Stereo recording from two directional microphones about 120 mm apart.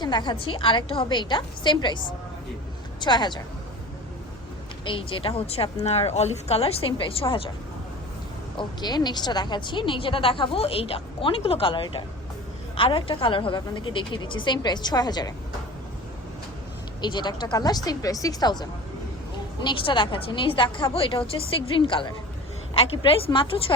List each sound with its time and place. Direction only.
0.0 s a woman's voice: 40° left (ahead or behind)
4.9 s a woman's voice: 45° left (ahead or behind)
8.5 s a woman's voice: 35° left (ahead or behind)
17.0 s a woman's voice: 40° left (ahead or behind)
19.5 s a woman's voice: 45° left (ahead or behind)